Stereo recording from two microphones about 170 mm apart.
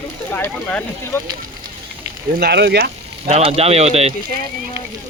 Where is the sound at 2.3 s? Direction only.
75° right (ahead or behind).